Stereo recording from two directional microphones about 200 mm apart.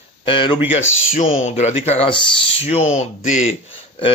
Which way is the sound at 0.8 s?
80° left.